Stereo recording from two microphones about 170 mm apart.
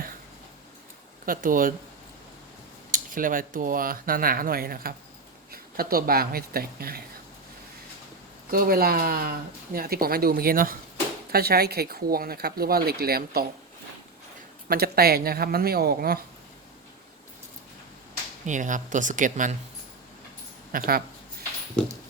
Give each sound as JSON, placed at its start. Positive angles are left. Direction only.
{"t": 1.2, "sound": "speech", "side_deg": -55}
{"t": 2.9, "sound": "speech", "side_deg": -55}
{"t": 8.4, "sound": "speech", "side_deg": -60}
{"t": 14.7, "sound": "speech", "side_deg": -65}
{"t": 18.4, "sound": "speech", "side_deg": -45}
{"t": 20.7, "sound": "speech", "side_deg": -60}